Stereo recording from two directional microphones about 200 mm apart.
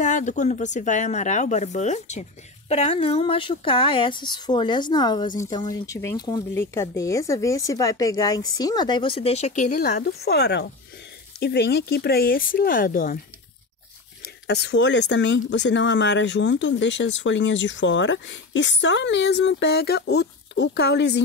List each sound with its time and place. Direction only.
0.0 s speech: 40° left (ahead or behind)
14.2 s speech: 55° left (ahead or behind)